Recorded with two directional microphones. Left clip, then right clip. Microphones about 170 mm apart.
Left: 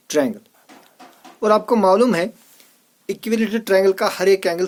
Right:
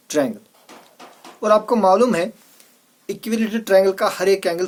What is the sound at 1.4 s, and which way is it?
Speech, 50° left (ahead or behind).